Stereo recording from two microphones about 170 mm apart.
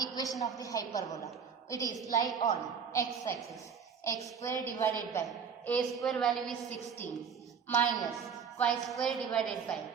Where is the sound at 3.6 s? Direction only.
20° left (ahead or behind).